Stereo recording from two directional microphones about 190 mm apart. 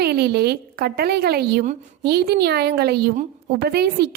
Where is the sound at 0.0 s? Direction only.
60° right (ahead or behind).